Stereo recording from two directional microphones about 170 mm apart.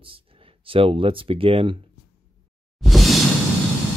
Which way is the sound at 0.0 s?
30° right (ahead or behind).